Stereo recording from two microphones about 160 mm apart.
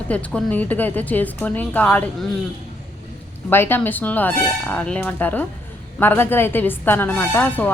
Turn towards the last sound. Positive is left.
turn(degrees=10)  # may be behind; listen again after turning